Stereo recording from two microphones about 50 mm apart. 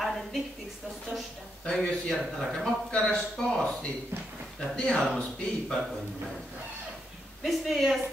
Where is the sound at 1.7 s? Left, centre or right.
Centre.